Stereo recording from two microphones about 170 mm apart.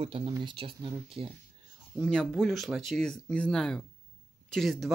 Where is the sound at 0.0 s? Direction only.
30° right (ahead or behind).